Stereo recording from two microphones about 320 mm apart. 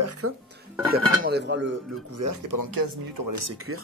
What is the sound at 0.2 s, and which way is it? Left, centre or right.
Speech, right.